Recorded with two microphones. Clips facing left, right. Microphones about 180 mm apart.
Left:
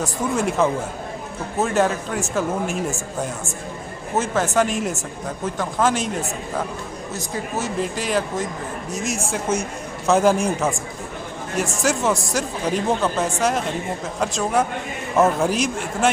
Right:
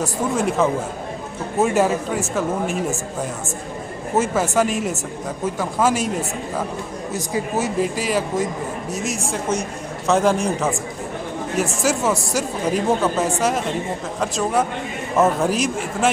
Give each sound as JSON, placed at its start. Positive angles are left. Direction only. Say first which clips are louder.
{"t": 0.0, "sound": "speech", "louder": "right 1 dB", "side_deg": 0}
{"t": 4.2, "sound": "speech", "louder": "right 1 dB", "side_deg": -5}
{"t": 7.1, "sound": "speech", "louder": "right 4 dB", "side_deg": -10}